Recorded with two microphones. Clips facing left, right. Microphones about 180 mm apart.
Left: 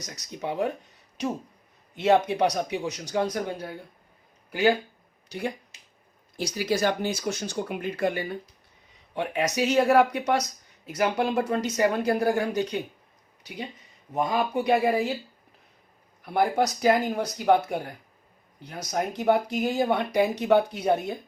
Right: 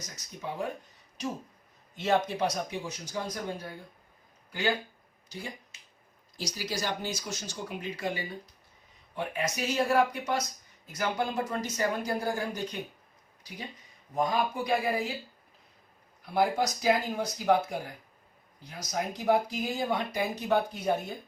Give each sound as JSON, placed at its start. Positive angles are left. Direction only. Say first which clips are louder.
{"t": 0.0, "sound": "speech", "louder": "left 6 dB", "side_deg": 70}
{"t": 5.3, "sound": "speech", "louder": "left 9 dB", "side_deg": 65}
{"t": 9.1, "sound": "speech", "louder": "left 6 dB", "side_deg": 70}
{"t": 14.1, "sound": "speech", "louder": "left 3 dB", "side_deg": 70}
{"t": 16.3, "sound": "speech", "louder": "left 3 dB", "side_deg": 65}